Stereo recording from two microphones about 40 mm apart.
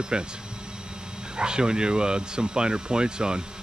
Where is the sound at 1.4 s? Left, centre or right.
Right.